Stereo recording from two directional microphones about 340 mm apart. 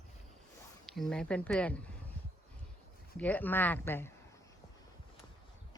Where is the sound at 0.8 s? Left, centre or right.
Centre.